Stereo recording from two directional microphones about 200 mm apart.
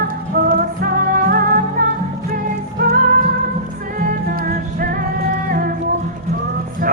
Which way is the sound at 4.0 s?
45° right (ahead or behind).